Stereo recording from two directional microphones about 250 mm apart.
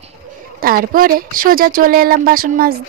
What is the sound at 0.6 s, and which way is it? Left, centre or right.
Speech, right.